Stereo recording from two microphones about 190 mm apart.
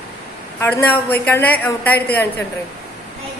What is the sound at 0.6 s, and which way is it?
A woman's voice, 10° left (ahead or behind).